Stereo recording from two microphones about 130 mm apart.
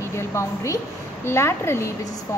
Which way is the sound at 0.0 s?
20° left (ahead or behind).